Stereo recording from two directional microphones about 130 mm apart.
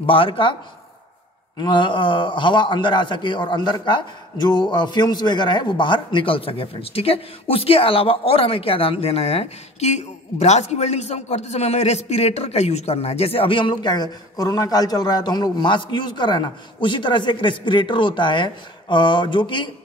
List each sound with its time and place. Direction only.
0.0 s a man's voice: 45° left (ahead or behind)
1.6 s a man's voice: 35° left (ahead or behind)